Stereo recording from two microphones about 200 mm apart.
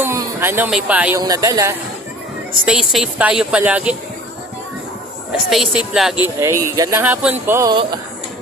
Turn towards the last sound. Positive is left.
turn(degrees=-20)  # may be behind; listen again after turning